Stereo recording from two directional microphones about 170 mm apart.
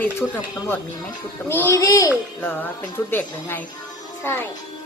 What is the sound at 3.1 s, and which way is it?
Speech, 10° left (ahead or behind).